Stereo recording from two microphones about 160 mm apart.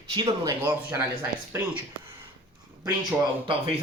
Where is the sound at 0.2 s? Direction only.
20° right (ahead or behind).